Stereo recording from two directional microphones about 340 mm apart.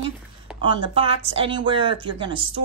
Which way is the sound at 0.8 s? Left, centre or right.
Centre.